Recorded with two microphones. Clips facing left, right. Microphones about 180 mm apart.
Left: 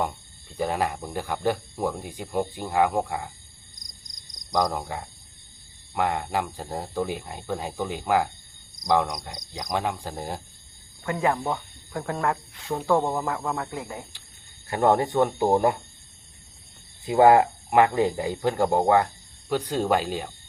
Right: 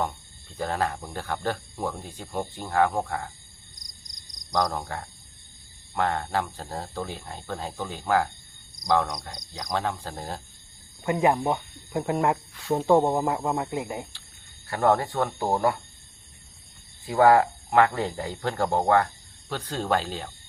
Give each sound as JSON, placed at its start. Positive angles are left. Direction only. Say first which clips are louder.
{"t": 0.5, "sound": "speech", "louder": "left 2 dB", "side_deg": 15}
{"t": 4.5, "sound": "speech", "louder": "left 1 dB", "side_deg": 15}
{"t": 11.0, "sound": "speech", "louder": "right 2 dB", "side_deg": -20}
{"t": 14.7, "sound": "speech", "louder": "left 2 dB", "side_deg": 20}
{"t": 17.1, "sound": "speech", "louder": "left 2 dB", "side_deg": 20}